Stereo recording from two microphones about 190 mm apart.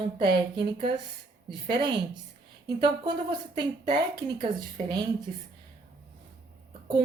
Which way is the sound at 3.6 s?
25° right (ahead or behind).